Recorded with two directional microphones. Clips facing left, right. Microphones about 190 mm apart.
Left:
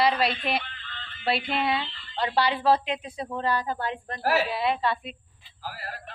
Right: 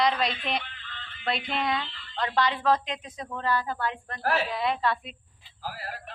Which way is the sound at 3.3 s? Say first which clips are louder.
Left 1 dB; 15° left (ahead or behind).